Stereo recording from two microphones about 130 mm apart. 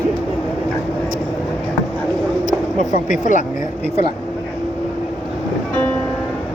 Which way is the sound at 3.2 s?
75° left (ahead or behind).